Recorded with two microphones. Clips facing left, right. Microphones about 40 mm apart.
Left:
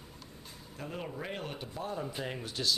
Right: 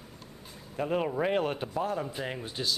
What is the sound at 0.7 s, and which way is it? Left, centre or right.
Speech, right.